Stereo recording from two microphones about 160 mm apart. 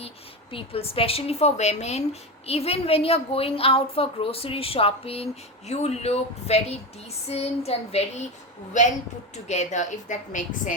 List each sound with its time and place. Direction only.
0.5 s a woman's voice: 35° left (ahead or behind)
9.3 s a woman's voice: 45° left (ahead or behind)